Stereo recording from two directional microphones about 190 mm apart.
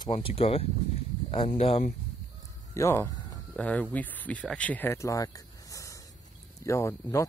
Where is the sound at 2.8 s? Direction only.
15° left (ahead or behind).